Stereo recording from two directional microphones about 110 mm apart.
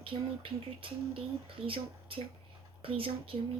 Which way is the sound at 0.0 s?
55° right (ahead or behind).